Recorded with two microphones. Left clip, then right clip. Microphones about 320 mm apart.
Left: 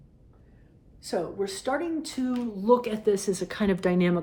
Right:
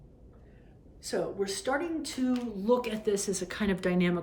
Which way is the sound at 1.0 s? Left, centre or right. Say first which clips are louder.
Left 2 dB; centre.